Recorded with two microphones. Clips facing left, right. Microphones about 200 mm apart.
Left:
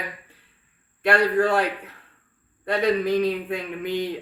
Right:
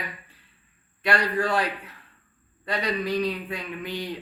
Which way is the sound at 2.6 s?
55° left (ahead or behind).